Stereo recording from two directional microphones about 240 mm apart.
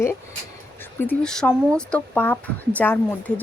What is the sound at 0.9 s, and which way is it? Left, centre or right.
Speech, centre.